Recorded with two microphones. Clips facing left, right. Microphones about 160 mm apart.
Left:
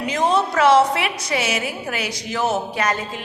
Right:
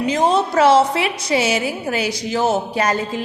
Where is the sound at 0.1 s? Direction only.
30° right (ahead or behind).